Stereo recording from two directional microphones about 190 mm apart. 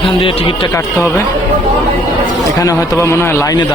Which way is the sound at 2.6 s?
15° left (ahead or behind).